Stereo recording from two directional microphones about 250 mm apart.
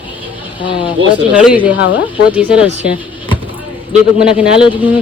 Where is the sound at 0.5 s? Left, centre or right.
Centre.